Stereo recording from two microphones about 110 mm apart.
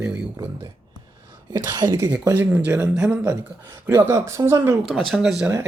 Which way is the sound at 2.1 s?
15° right (ahead or behind).